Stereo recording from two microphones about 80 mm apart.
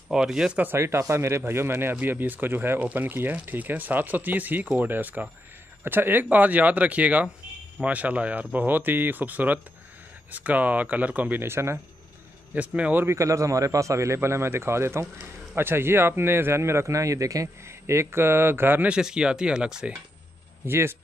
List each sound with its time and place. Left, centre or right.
0.1 s speech: centre
0.7 s speech: right
12.5 s speech: centre
13.0 s speech: right
18.9 s speech: centre
20.6 s speech: right